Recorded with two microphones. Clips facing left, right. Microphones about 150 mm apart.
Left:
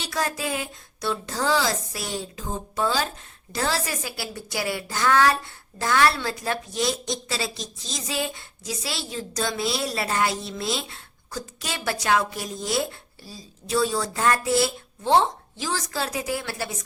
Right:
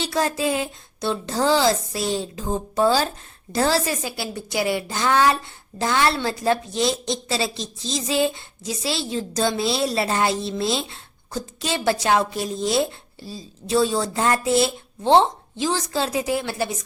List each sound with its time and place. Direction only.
0.0 s a woman's voice: 25° right (ahead or behind)